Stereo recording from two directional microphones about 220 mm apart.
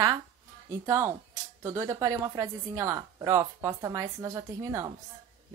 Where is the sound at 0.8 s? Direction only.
15° right (ahead or behind).